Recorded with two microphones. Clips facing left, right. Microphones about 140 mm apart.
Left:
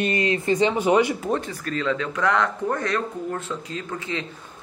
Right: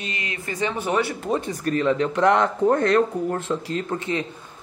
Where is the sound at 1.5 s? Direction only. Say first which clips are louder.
Right 4 dB; 20° right (ahead or behind).